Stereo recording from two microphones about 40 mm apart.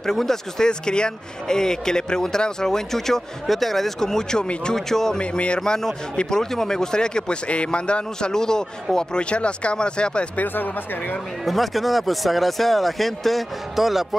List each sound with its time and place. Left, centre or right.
0.0 s speech: centre
5.2 s speech: left
5.6 s speech: centre
10.3 s speech: left
11.4 s speech: centre